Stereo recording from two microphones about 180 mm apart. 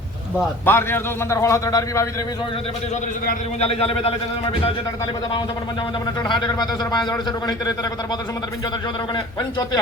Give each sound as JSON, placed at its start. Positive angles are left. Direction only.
{"t": 0.6, "sound": "a man's voice", "side_deg": 10}
{"t": 3.6, "sound": "a man's voice", "side_deg": 35}
{"t": 6.2, "sound": "a man's voice", "side_deg": 25}